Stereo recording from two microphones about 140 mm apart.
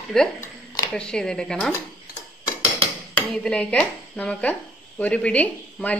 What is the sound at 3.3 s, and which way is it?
Speech, 5° left (ahead or behind).